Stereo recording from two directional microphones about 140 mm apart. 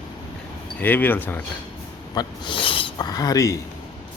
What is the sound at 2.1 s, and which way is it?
Speech, 35° left (ahead or behind).